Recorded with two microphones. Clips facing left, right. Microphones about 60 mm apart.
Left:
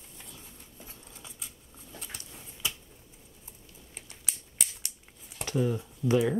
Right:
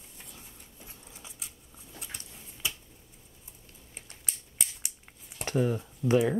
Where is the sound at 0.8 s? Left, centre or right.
Centre.